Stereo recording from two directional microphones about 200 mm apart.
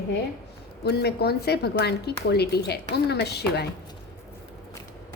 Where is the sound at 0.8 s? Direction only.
55° left (ahead or behind).